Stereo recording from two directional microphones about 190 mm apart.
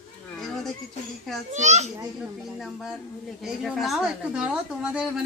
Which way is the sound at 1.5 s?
35° right (ahead or behind).